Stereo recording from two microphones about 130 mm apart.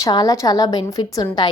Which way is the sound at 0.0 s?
30° left (ahead or behind).